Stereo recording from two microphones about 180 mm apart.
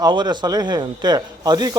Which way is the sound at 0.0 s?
25° right (ahead or behind).